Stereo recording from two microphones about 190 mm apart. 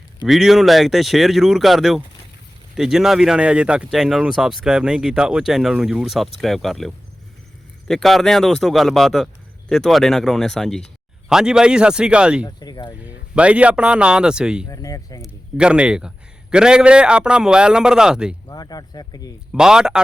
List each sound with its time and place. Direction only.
0.3 s a man's voice: centre (ahead or behind)
12.5 s speech: 20° left (ahead or behind)
13.1 s a man's voice: 5° right (ahead or behind)
14.7 s speech: 20° left (ahead or behind)
15.2 s a man's voice: 5° right (ahead or behind)
18.4 s speech: 20° left (ahead or behind)
19.5 s a man's voice: 5° right (ahead or behind)